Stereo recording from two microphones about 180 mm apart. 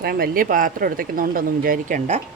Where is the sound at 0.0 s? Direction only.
60° right (ahead or behind).